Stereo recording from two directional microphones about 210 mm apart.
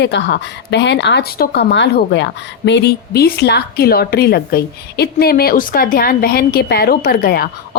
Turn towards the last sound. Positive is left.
turn(degrees=50)  # may be behind; listen again after turning